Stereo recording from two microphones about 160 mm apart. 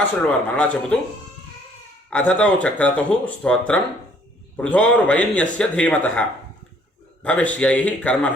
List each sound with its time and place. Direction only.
0.0 s speech: 10° left (ahead or behind)
2.0 s speech: 5° left (ahead or behind)